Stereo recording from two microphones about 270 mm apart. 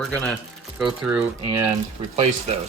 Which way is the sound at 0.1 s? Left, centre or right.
Centre.